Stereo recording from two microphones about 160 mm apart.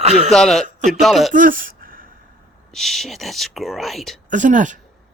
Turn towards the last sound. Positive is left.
turn(degrees=-50)  # may be behind; listen again after turning